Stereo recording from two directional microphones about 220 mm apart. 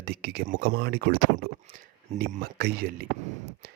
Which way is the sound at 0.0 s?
45° right (ahead or behind).